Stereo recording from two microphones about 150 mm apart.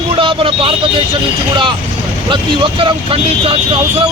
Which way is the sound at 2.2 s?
35° right (ahead or behind).